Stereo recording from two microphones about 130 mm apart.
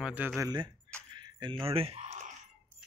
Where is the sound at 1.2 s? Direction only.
35° right (ahead or behind).